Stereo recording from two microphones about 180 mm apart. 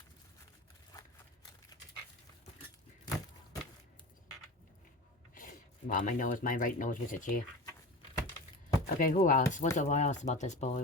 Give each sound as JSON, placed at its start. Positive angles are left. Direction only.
{"t": 1.7, "sound": "dog", "side_deg": 20}
{"t": 5.3, "sound": "speech", "side_deg": 50}
{"t": 9.0, "sound": "speech", "side_deg": 50}